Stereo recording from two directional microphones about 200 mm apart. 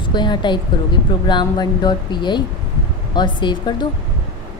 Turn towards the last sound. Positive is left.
turn(degrees=20)  # may be behind; listen again after turning